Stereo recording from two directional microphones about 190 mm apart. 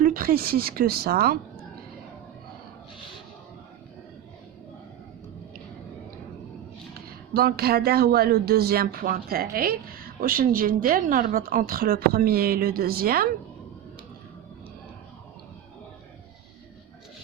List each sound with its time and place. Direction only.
0.0 s speech: 50° right (ahead or behind)
7.3 s speech: 55° right (ahead or behind)